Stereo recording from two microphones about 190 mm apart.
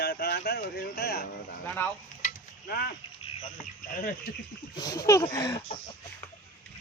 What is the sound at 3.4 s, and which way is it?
Speech, 45° left (ahead or behind).